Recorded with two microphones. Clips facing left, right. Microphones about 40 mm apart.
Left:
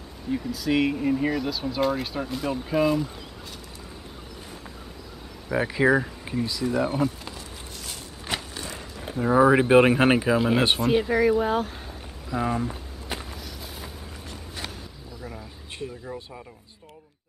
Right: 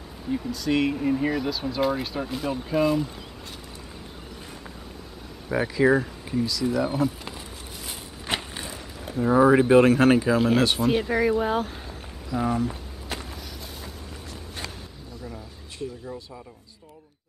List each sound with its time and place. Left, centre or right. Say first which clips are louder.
0.3 s speech: even; centre
5.7 s speech: right 1 dB; centre
7.2 s a sound: right 1 dB; centre
9.2 s speech: even; centre
9.6 s speech: right 1 dB; left
10.8 s speech: left 1 dB; centre
12.6 s walk: right 1 dB; centre